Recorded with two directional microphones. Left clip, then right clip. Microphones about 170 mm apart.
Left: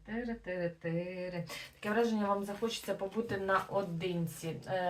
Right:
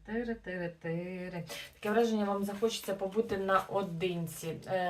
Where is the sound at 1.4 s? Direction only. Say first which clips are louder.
Right 3 dB; 15° right (ahead or behind).